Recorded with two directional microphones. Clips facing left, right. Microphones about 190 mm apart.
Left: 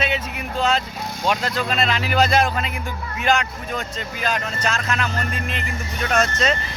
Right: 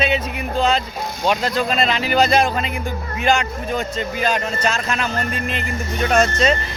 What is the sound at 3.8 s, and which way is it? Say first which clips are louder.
Speech: right 6 dB; centre (ahead or behind).